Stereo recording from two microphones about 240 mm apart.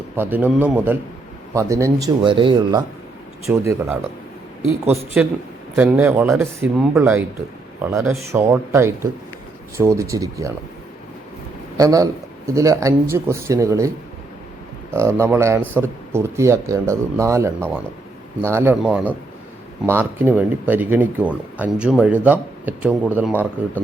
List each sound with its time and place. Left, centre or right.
0.2 s speech: centre
3.5 s speech: centre
5.2 s a man's voice: centre
11.8 s speech: centre
14.9 s speech: centre